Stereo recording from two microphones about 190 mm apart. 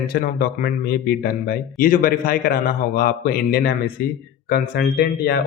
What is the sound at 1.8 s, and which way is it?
Speech, 50° left (ahead or behind).